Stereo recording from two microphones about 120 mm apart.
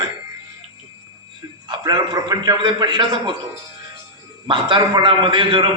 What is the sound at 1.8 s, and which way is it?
A man's voice, 35° right (ahead or behind).